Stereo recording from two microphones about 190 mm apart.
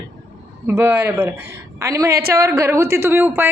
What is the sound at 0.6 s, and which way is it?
Speech, 10° right (ahead or behind).